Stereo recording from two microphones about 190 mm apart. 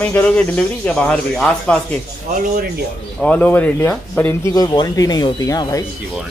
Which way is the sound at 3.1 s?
5° left (ahead or behind).